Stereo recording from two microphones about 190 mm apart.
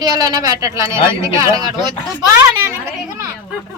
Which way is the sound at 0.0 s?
20° right (ahead or behind).